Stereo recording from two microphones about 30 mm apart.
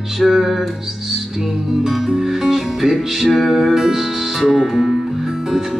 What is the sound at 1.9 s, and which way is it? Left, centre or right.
Music, centre.